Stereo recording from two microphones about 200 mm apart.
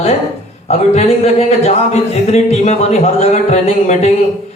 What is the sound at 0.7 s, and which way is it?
Speech, 30° left (ahead or behind).